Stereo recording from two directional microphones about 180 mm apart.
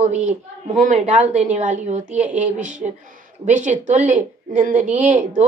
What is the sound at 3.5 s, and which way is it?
A woman's voice, 40° right (ahead or behind).